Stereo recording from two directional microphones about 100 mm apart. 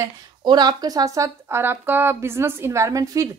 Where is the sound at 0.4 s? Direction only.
45° right (ahead or behind).